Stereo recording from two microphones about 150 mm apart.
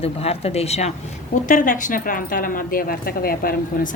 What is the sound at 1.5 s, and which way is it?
Speech, 60° left (ahead or behind).